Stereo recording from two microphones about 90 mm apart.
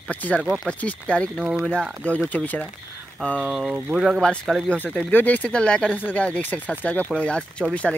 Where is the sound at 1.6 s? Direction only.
10° left (ahead or behind).